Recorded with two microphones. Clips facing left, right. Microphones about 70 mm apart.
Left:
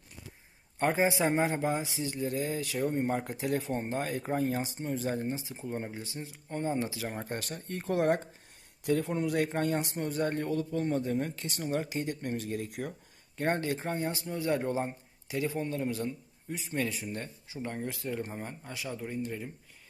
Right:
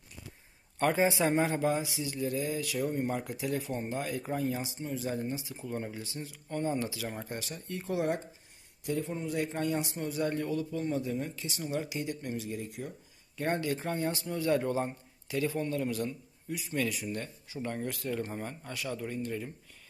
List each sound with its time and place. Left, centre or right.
0.8 s speech: left
7.3 s speech: left
8.8 s speech: left
13.3 s a man's voice: left